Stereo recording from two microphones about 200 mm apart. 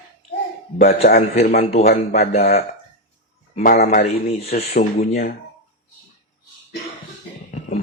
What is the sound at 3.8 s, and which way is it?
Speech, 30° left (ahead or behind).